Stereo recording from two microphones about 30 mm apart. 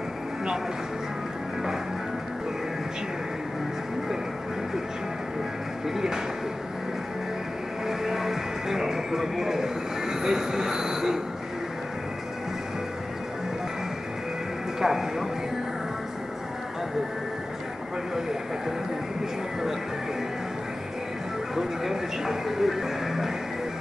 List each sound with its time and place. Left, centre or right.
5.9 s music: centre
7.8 s music: centre
14.8 s music: centre
21.5 s speech: centre